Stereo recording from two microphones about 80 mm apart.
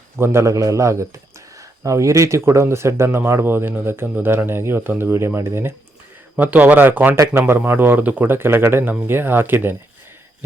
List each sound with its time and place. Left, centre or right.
0.2 s speech: right
6.3 s speech: centre